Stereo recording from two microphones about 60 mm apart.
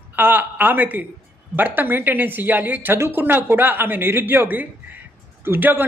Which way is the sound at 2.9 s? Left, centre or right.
Right.